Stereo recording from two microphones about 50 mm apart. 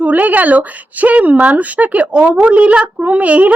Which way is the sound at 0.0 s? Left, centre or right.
Right.